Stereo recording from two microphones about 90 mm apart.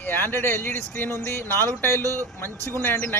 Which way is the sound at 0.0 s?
20° left (ahead or behind).